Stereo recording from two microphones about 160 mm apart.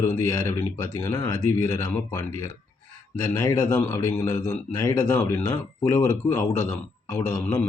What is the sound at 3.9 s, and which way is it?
Speech, 15° left (ahead or behind).